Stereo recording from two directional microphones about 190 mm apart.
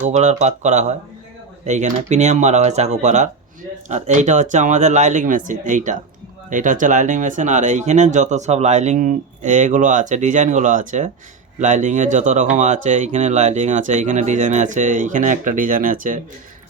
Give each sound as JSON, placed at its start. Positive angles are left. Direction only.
{"t": 0.0, "sound": "speech", "side_deg": -35}